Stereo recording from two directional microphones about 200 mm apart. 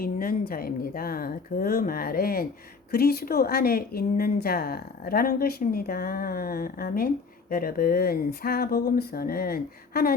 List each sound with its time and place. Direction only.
0.0 s speech: 45° left (ahead or behind)